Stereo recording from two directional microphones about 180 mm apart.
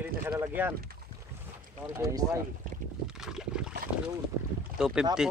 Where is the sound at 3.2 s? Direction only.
5° right (ahead or behind).